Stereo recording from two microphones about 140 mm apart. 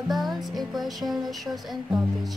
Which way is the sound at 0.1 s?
Centre (ahead or behind).